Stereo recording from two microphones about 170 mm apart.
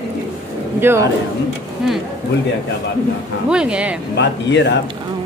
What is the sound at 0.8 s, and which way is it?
Speech, 15° right (ahead or behind).